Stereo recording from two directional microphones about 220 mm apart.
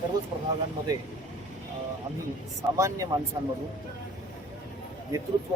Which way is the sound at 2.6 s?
15° right (ahead or behind).